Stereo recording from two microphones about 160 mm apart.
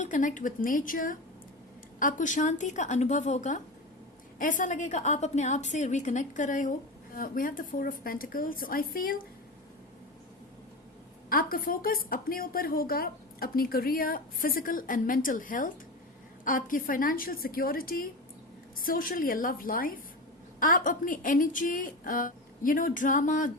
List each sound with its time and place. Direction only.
0.0 s a woman's voice: 50° left (ahead or behind)
11.3 s speech: 65° left (ahead or behind)